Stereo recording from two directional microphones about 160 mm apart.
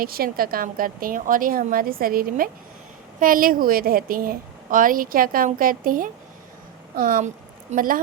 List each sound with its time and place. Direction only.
0.0 s a woman's voice: 65° right (ahead or behind)